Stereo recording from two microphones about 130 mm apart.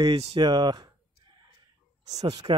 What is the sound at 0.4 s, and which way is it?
Speech, 35° right (ahead or behind).